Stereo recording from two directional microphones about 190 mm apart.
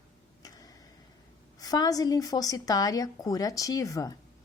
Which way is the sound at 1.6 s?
20° left (ahead or behind).